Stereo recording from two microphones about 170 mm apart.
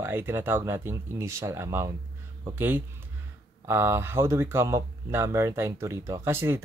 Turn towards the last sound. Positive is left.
turn(degrees=-15)  # may be behind; listen again after turning